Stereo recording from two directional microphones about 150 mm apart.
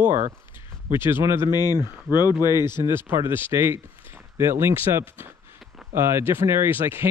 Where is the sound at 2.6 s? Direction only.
15° right (ahead or behind).